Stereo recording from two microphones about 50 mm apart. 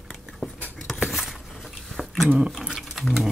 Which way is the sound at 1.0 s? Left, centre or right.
Centre.